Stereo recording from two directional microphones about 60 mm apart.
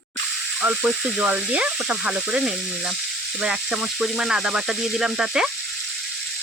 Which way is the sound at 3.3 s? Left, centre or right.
Centre.